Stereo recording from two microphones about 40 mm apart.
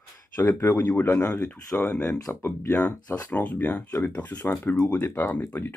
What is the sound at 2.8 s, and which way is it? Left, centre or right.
Speech, left.